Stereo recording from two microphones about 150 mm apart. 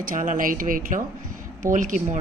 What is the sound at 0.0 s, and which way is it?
Speech, 60° right (ahead or behind).